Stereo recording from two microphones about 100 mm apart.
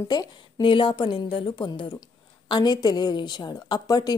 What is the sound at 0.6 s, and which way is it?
A woman's voice, 55° left (ahead or behind).